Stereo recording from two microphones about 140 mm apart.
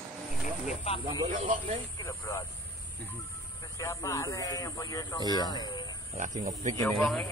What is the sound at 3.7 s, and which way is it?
Speech, 20° left (ahead or behind).